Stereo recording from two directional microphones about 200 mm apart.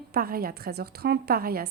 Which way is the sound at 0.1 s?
50° right (ahead or behind).